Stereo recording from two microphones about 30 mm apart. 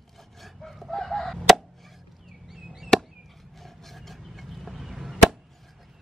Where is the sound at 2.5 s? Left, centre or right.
Centre.